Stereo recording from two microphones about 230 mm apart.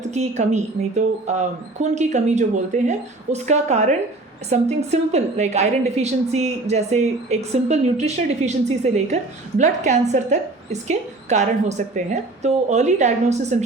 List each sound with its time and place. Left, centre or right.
0.0 s a woman's voice: right